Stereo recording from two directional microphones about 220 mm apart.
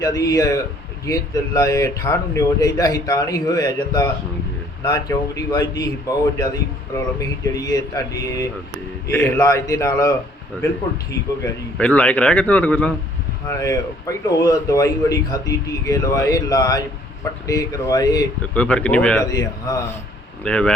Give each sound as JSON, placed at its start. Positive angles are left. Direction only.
{"t": 0.0, "sound": "a man's voice", "side_deg": 15}
{"t": 11.4, "sound": "a man's voice", "side_deg": 5}
{"t": 18.5, "sound": "a man's voice", "side_deg": 5}